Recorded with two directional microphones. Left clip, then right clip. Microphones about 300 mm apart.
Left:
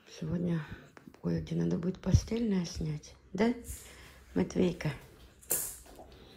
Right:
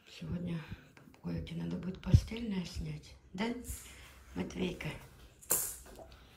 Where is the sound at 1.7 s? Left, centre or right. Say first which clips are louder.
Left 2 dB; centre.